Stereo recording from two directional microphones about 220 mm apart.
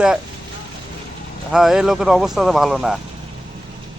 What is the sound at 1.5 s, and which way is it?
Speech, 5° right (ahead or behind).